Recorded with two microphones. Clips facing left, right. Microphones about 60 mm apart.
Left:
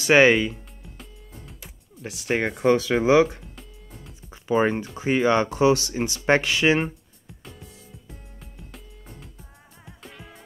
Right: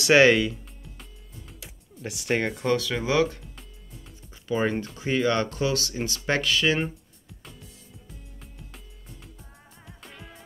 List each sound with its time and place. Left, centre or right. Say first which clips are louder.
0.0 s speech: left 1 dB; centre
1.4 s music: left 1 dB; centre
2.6 s speech: left 6 dB; left
3.2 s speech: left 5 dB; centre
4.3 s music: left 5 dB; left
4.9 s speech: left 5 dB; left
10.0 s music: left 2 dB; centre